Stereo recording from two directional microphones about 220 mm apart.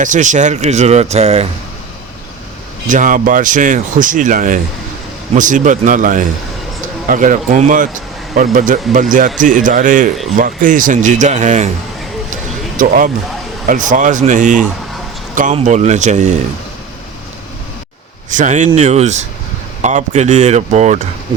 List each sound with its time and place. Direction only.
0.0 s speech: 35° right (ahead or behind)
2.9 s speech: 35° right (ahead or behind)
12.7 s speech: 40° right (ahead or behind)
18.3 s speech: 35° right (ahead or behind)